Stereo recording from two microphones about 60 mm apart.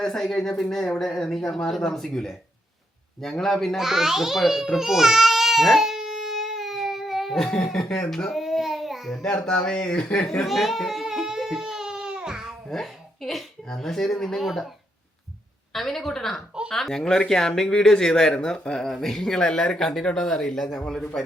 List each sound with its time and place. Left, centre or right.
0.0 s a woman's voice: centre
3.8 s babbling: centre
7.4 s speech: centre
8.3 s babbling: centre
9.4 s speech: centre
10.4 s baby cry: centre
12.6 s speech: centre
15.7 s a woman's voice: centre